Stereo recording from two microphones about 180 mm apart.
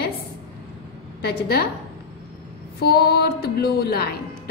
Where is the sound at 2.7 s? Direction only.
60° left (ahead or behind).